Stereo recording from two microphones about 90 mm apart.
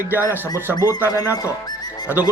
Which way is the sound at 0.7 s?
45° left (ahead or behind).